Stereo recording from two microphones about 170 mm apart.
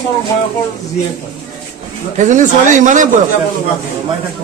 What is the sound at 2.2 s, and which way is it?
Speech, 45° right (ahead or behind).